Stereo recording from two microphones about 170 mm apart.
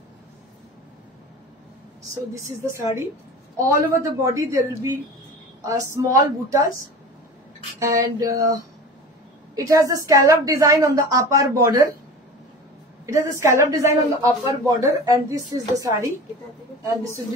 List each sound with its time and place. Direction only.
2.3 s speech: 15° right (ahead or behind)
7.8 s speech: 20° right (ahead or behind)
13.0 s speech: 15° right (ahead or behind)